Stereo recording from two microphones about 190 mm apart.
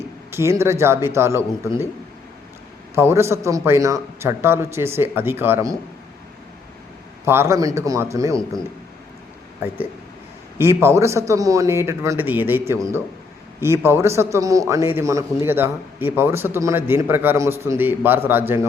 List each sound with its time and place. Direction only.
0.3 s a man's voice: 15° right (ahead or behind)
2.9 s a man's voice: 15° right (ahead or behind)
7.3 s a man's voice: 15° right (ahead or behind)
10.6 s a man's voice: 10° right (ahead or behind)